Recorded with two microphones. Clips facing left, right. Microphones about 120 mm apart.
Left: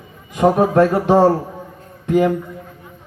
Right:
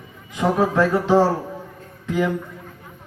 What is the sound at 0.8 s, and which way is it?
A man's voice, 60° left (ahead or behind).